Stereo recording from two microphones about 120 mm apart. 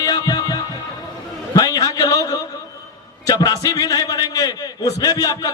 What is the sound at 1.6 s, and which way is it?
A man's voice, 35° left (ahead or behind).